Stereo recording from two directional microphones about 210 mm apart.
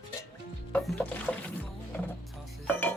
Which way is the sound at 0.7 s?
5° left (ahead or behind).